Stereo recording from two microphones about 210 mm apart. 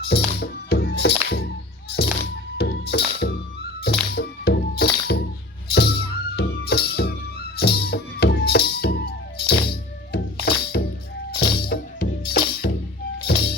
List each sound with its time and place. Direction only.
0.1 s music: 50° left (ahead or behind)
10.4 s music: 50° left (ahead or behind)